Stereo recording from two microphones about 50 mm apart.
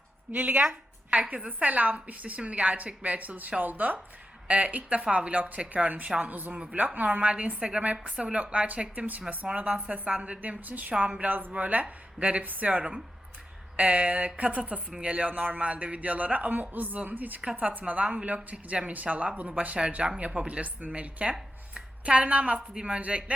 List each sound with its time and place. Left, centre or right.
0.3 s a woman's voice: right
1.5 s a man's voice: right
6.7 s speech: right
11.3 s a man's voice: right
13.8 s a man's voice: right